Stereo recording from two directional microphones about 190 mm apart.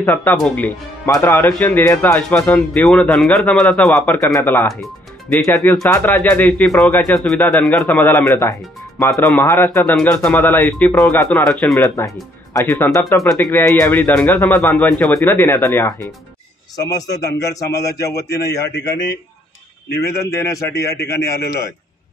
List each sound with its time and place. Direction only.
0.0 s speech: 10° left (ahead or behind)
18.8 s speech: 65° left (ahead or behind)
20.1 s speech: 15° left (ahead or behind)